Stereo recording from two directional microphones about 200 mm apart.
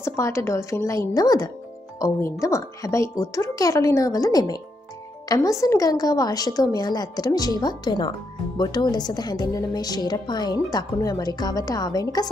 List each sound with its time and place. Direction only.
0.0 s a woman's voice: 15° left (ahead or behind)